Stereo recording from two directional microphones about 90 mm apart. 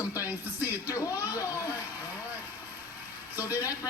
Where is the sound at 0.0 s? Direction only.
35° left (ahead or behind).